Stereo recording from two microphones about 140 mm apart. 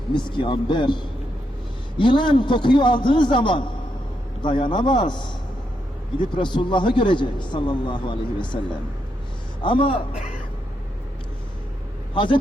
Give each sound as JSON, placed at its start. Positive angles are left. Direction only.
{"t": 0.1, "sound": "a man's voice", "side_deg": 35}
{"t": 6.3, "sound": "a man's voice", "side_deg": 35}
{"t": 9.6, "sound": "a man's voice", "side_deg": 35}
{"t": 12.1, "sound": "a man's voice", "side_deg": 35}